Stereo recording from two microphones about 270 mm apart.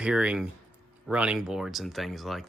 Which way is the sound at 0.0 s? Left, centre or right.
Centre.